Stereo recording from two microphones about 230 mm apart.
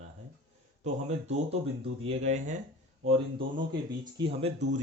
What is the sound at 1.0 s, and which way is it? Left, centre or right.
Speech, right.